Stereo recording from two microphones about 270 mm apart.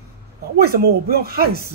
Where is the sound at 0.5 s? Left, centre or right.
Right.